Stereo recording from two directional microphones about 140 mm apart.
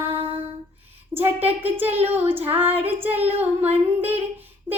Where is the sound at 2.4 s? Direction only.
15° right (ahead or behind).